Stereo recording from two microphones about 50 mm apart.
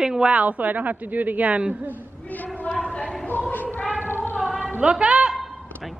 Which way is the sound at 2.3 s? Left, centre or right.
Left.